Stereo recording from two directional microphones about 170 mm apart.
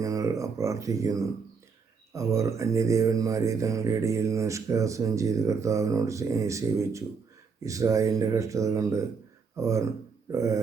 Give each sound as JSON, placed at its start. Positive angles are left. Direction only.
{"t": 0.0, "sound": "speech", "side_deg": -20}